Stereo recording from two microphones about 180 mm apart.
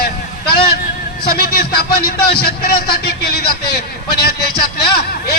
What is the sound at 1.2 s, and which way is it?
Speech, 60° left (ahead or behind).